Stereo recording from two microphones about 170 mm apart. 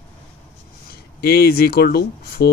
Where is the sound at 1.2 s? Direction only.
65° left (ahead or behind).